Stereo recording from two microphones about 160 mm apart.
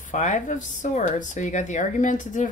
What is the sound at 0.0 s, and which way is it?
Speech, 50° left (ahead or behind).